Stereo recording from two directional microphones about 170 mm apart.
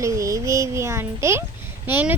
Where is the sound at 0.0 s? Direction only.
20° right (ahead or behind).